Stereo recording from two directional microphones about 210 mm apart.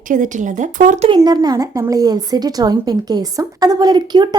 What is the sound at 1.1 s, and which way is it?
Speech, 20° right (ahead or behind).